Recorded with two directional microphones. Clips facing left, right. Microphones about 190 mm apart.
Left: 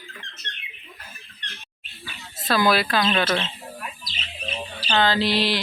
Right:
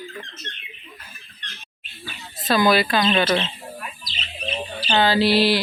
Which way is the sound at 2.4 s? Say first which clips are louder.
Right 3 dB; centre (ahead or behind).